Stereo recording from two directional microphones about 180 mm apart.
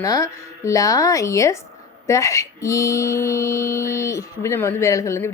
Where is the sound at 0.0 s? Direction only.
15° left (ahead or behind).